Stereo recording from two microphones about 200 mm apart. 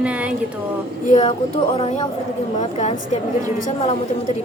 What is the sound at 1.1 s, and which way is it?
Speech, 30° left (ahead or behind).